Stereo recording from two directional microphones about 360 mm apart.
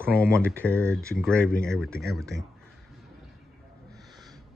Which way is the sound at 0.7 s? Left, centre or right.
Centre.